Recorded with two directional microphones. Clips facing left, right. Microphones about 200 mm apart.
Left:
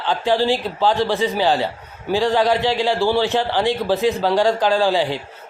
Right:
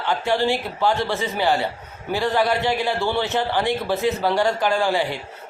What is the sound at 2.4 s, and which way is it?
Speech, 90° left.